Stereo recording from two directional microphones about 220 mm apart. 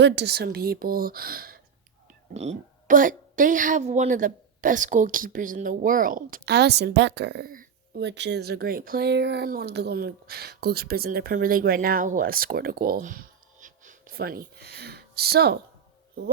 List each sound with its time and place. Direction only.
0.0 s speech: 50° right (ahead or behind)
2.3 s a woman's voice: 30° right (ahead or behind); by 15.5 s 45° right (ahead or behind)